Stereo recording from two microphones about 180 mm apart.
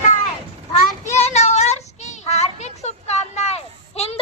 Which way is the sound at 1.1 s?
40° left (ahead or behind).